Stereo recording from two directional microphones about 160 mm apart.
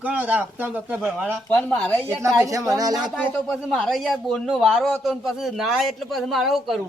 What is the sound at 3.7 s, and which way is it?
Speech, centre (ahead or behind).